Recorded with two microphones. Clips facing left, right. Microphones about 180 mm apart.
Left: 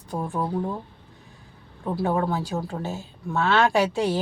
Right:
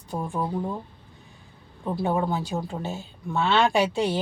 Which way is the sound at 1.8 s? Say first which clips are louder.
Left 1 dB; centre (ahead or behind).